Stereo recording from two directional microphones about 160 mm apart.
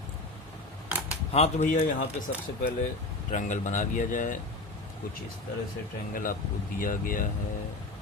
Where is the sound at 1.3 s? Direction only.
40° left (ahead or behind).